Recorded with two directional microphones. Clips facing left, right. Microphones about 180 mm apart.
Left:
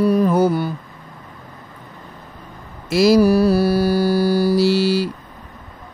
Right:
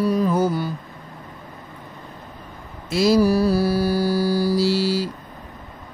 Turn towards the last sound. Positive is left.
turn(degrees=65)  # may be behind; listen again after turning